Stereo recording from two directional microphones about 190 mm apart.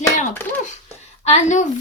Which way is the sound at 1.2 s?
35° left (ahead or behind).